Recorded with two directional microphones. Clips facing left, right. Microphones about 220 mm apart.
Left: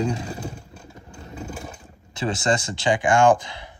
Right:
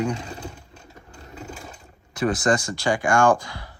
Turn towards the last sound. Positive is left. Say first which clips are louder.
# left 2 dB
turn(degrees=20)  # may be behind; listen again after turning